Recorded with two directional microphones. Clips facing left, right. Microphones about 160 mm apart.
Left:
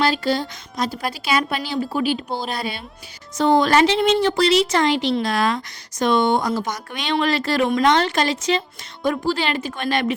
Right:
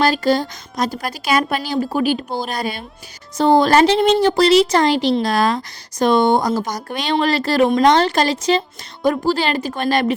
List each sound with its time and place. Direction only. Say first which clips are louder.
0.0 s a woman's voice: right 4 dB; 45° right (ahead or behind)